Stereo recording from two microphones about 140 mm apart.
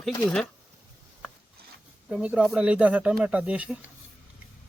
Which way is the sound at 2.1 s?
10° right (ahead or behind).